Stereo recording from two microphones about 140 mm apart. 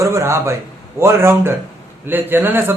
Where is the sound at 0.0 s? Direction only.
20° right (ahead or behind).